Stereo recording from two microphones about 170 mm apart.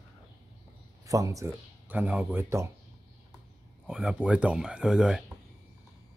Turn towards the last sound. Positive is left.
turn(degrees=-5)  # may be behind; listen again after turning